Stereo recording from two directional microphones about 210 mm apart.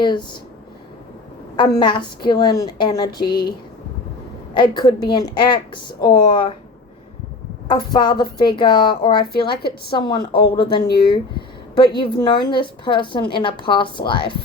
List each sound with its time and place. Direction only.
0.0 s a woman's voice: 20° left (ahead or behind)
1.5 s a woman's voice: 20° left (ahead or behind)
4.5 s a woman's voice: 20° left (ahead or behind)
7.7 s a woman's voice: 20° left (ahead or behind)
11.9 s a woman's voice: 20° left (ahead or behind)